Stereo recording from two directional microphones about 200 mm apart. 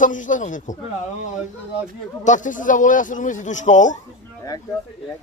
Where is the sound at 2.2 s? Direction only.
40° left (ahead or behind).